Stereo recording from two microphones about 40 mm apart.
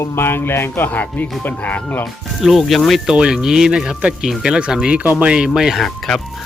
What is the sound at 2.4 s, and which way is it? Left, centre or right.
Speech, centre.